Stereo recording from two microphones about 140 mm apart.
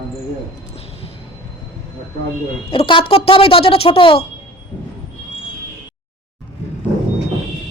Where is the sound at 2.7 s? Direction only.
40° left (ahead or behind).